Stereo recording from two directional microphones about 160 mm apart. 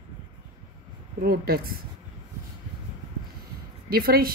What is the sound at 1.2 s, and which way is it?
Speech, 70° right (ahead or behind).